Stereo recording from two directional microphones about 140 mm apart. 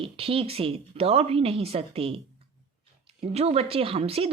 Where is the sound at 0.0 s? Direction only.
40° right (ahead or behind).